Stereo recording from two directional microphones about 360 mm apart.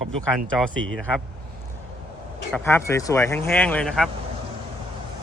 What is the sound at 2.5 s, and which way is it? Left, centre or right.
Speech, centre.